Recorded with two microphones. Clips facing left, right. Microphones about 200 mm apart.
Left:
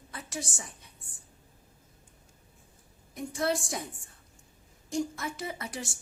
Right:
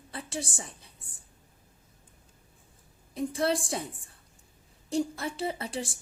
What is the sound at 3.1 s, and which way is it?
A woman's voice, 30° right (ahead or behind).